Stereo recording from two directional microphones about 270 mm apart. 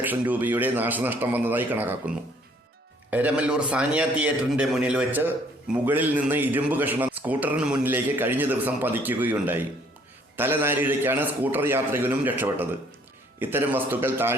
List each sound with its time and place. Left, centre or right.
0.0 s a man's voice: centre